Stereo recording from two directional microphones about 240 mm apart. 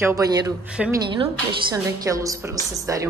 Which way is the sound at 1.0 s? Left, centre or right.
Centre.